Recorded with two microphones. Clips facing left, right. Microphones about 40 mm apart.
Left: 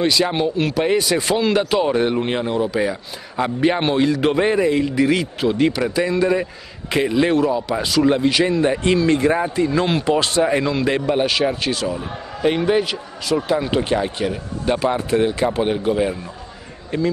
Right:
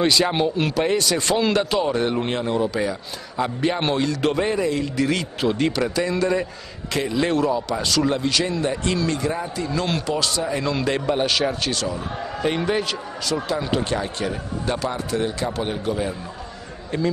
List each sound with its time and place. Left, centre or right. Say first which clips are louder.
0.0 s speech: left 1 dB; centre
0.8 s a man's voice: left 3 dB; centre; by 9.7 s left
9.7 s a man's voice: left 5 dB; centre
10.1 s a man's voice: left 6 dB; left
10.6 s a man's voice: left 3 dB; centre
14.8 s a man's voice: left 9 dB; left
16.9 s speech: left 3 dB; centre